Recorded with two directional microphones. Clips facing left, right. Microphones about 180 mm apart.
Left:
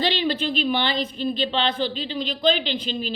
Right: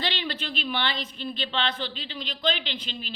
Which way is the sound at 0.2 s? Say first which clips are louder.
Left 9 dB; 35° left (ahead or behind).